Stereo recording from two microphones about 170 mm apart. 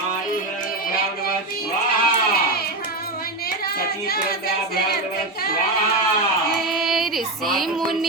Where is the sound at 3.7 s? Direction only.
65° left (ahead or behind).